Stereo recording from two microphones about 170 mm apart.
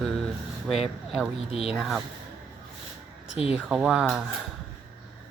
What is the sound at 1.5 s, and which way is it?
Speech, 35° left (ahead or behind).